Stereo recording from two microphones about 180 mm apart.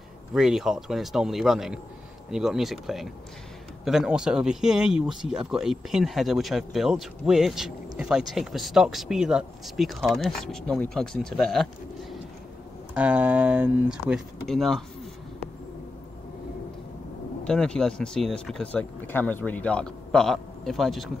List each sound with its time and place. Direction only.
0.3 s speech: centre (ahead or behind)
17.5 s speech: 5° left (ahead or behind)